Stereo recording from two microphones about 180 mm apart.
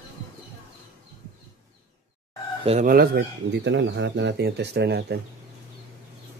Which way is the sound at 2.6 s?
45° right (ahead or behind).